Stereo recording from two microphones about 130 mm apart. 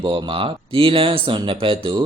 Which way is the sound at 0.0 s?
40° right (ahead or behind).